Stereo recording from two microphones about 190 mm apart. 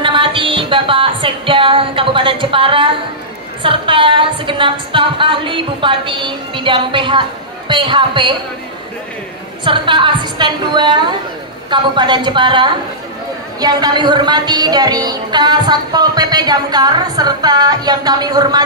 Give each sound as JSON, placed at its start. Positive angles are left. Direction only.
{"t": 0.0, "sound": "music", "side_deg": -25}
{"t": 3.6, "sound": "a woman's voice", "side_deg": -25}
{"t": 9.7, "sound": "a woman's voice", "side_deg": -25}